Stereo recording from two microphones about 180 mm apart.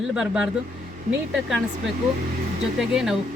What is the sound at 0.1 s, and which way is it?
Speech, 5° right (ahead or behind).